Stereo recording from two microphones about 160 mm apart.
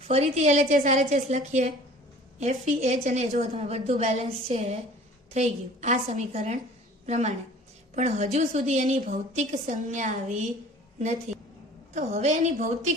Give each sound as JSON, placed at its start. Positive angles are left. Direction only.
{"t": 0.1, "sound": "a woman's voice", "side_deg": -40}
{"t": 11.3, "sound": "a sound", "side_deg": -45}
{"t": 11.9, "sound": "a woman's voice", "side_deg": -45}